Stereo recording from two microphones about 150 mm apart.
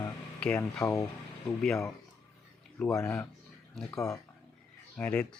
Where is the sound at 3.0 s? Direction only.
15° left (ahead or behind).